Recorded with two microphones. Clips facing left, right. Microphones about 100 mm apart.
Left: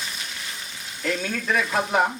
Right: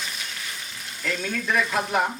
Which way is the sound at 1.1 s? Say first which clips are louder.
Left 1 dB; centre (ahead or behind).